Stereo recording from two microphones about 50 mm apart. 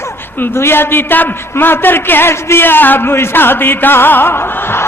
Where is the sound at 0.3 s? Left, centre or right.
Left.